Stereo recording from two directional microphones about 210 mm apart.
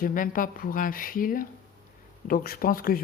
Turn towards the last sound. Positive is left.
turn(degrees=45)  # may be behind; listen again after turning